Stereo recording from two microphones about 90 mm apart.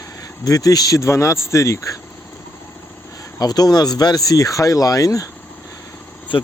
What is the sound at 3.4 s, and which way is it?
Speech, 45° left (ahead or behind).